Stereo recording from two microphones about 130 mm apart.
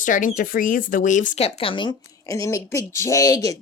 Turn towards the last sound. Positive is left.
turn(degrees=25)  # may be behind; listen again after turning